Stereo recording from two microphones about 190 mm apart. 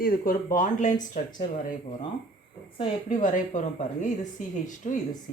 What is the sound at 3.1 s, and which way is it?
Speech, 45° left (ahead or behind).